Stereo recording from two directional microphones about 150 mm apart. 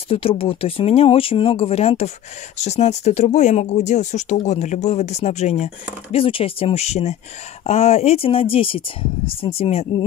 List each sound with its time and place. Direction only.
0.1 s speech: 40° left (ahead or behind)
6.1 s speech: 40° left (ahead or behind)